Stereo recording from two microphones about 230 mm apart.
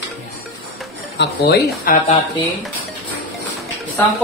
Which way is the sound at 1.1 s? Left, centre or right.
Left.